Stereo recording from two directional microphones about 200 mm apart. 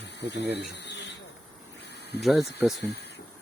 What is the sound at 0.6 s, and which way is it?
Insect, 60° left (ahead or behind).